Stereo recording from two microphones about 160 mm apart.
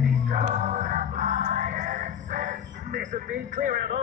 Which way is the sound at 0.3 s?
50° right (ahead or behind).